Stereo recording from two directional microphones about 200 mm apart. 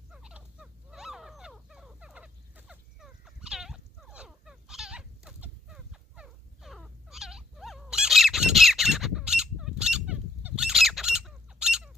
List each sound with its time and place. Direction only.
0.1 s dog: 5° right (ahead or behind)